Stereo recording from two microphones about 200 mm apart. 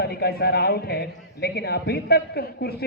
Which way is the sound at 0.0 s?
55° left (ahead or behind).